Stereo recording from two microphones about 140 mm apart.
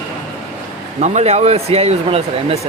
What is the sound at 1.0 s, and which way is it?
Speech, 50° right (ahead or behind).